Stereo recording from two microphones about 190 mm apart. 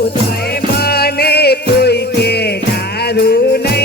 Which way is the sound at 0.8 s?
55° left (ahead or behind).